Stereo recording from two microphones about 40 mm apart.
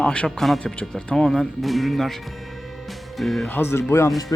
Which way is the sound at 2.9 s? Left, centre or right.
Centre.